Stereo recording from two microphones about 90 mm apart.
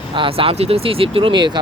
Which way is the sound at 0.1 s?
80° right.